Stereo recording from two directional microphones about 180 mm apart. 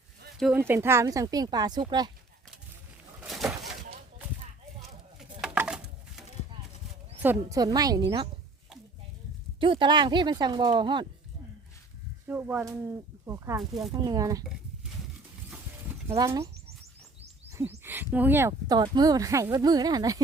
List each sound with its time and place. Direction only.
0.7 s speech: 15° right (ahead or behind)
3.2 s a sound: centre (ahead or behind)
5.4 s a sound: 5° right (ahead or behind)
7.2 s speech: 15° right (ahead or behind)
9.6 s speech: 30° right (ahead or behind)
12.3 s speech: 10° right (ahead or behind)
15.4 s a sound: 10° right (ahead or behind)
16.0 s speech: 20° right (ahead or behind)
17.5 s speech: 15° right (ahead or behind)